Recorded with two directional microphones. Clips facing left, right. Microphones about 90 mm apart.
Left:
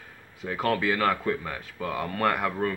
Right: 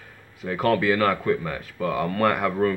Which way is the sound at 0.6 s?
20° left (ahead or behind).